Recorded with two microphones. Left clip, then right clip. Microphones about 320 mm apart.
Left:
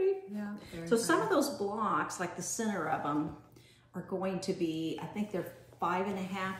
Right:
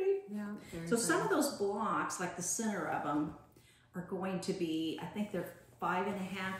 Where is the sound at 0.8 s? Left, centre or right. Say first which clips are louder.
Left 3 dB; centre.